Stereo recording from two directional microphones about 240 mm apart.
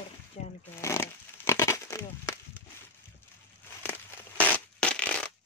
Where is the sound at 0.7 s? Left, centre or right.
Centre.